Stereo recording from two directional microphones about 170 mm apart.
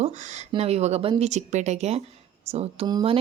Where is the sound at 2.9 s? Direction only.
25° right (ahead or behind).